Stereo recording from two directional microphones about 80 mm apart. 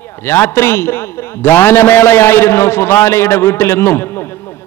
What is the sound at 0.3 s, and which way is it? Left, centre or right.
A man's voice, left.